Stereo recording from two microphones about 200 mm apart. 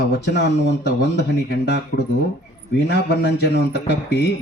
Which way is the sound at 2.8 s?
55° left (ahead or behind).